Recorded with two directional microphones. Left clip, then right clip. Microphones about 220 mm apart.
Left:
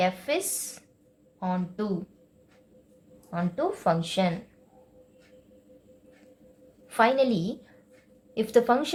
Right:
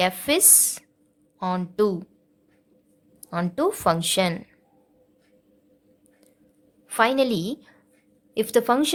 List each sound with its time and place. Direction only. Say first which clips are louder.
0.0 s a woman's voice: right 5 dB; 45° right (ahead or behind)
3.2 s a woman's voice: right 5 dB; 45° right (ahead or behind)
6.8 s a woman's voice: right 2 dB; 35° right (ahead or behind)